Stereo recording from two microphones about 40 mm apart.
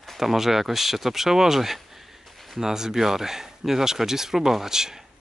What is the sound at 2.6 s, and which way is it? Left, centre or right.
Speech, centre.